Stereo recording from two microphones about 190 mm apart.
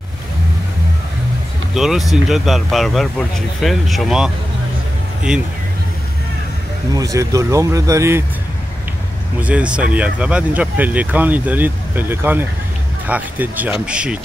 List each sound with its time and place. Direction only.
1.8 s speech: centre (ahead or behind)
5.3 s speech: 5° right (ahead or behind)
6.9 s speech: 20° right (ahead or behind)
9.4 s speech: 5° right (ahead or behind)